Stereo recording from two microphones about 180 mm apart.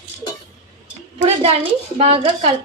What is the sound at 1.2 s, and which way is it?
A woman's voice, 35° right (ahead or behind).